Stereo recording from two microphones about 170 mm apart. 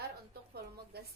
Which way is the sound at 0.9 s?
70° right (ahead or behind).